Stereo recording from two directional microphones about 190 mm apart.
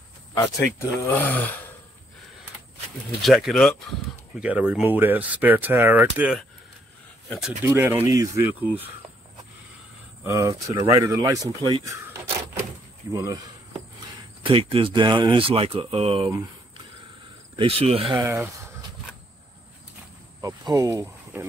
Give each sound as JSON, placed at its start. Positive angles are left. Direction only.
{"t": 0.7, "sound": "speech", "side_deg": 10}
{"t": 3.2, "sound": "speech", "side_deg": 0}
{"t": 10.2, "sound": "speech", "side_deg": -15}
{"t": 14.4, "sound": "speech", "side_deg": -30}
{"t": 16.3, "sound": "a sound", "side_deg": -15}
{"t": 17.6, "sound": "speech", "side_deg": -30}
{"t": 18.2, "sound": "speech", "side_deg": -10}
{"t": 20.3, "sound": "speech", "side_deg": -20}